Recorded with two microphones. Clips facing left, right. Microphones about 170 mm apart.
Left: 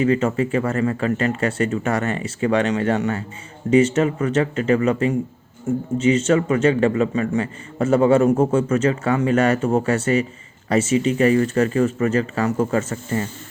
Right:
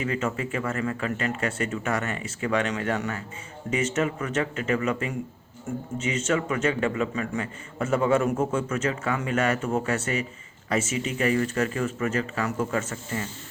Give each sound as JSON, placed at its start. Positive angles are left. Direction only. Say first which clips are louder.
{"t": 0.0, "sound": "a man's voice", "louder": "left 9 dB", "side_deg": 35}